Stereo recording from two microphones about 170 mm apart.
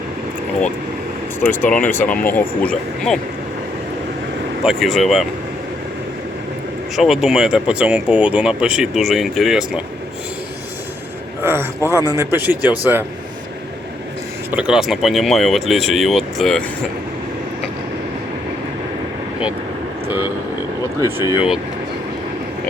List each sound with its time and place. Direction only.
1.5 s speech: 10° left (ahead or behind)
4.6 s speech: centre (ahead or behind)
6.9 s speech: centre (ahead or behind)
11.4 s a man's voice: 15° right (ahead or behind)
14.5 s speech: 5° right (ahead or behind)
20.1 s speech: 10° right (ahead or behind)